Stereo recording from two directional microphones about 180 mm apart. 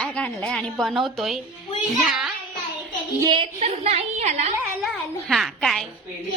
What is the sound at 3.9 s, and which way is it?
Speech, 35° right (ahead or behind).